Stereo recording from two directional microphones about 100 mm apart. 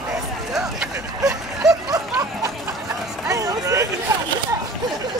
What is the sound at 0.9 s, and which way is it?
Vehicle, 35° right (ahead or behind).